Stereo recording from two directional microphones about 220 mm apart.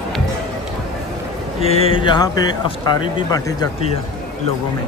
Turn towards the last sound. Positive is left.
turn(degrees=15)  # may be behind; listen again after turning